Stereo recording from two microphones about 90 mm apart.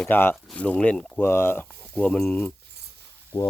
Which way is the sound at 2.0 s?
10° left (ahead or behind).